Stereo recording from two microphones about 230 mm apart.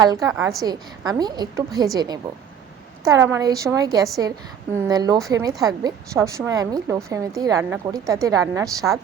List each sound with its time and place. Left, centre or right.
0.0 s a woman's voice: centre